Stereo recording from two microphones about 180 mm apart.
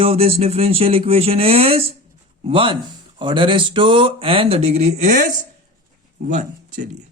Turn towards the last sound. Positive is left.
turn(degrees=-45)  # may be behind; listen again after turning